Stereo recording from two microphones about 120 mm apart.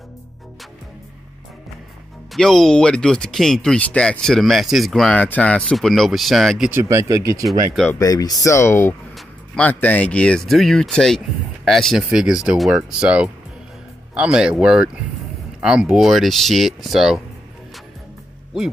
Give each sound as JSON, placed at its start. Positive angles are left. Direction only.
{"t": 2.3, "sound": "speech", "side_deg": 5}
{"t": 6.7, "sound": "speech", "side_deg": -20}
{"t": 7.4, "sound": "speech", "side_deg": 0}
{"t": 8.0, "sound": "speech", "side_deg": 30}